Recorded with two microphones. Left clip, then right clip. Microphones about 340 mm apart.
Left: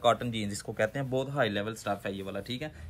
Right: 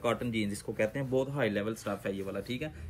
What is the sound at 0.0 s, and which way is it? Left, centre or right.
Speech, left.